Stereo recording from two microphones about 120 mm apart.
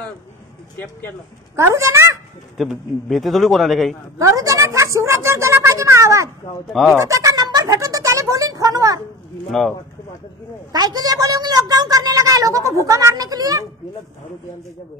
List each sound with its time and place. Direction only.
1.8 s speech: 25° right (ahead or behind)
2.5 s a man's voice: centre (ahead or behind)
4.2 s speech: 25° right (ahead or behind)
6.7 s a man's voice: centre (ahead or behind)
7.0 s speech: 25° right (ahead or behind)
9.5 s a man's voice: 5° left (ahead or behind)
10.7 s a woman's voice: 35° right (ahead or behind)